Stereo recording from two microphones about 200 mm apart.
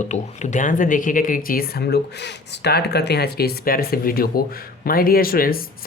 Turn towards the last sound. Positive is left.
turn(degrees=45)  # may be behind; listen again after turning